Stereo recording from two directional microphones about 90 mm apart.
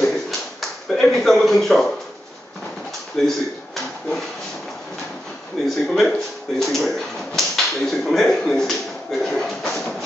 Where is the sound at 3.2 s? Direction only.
5° left (ahead or behind).